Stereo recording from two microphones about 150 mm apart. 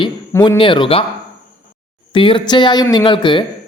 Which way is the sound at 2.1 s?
35° left (ahead or behind).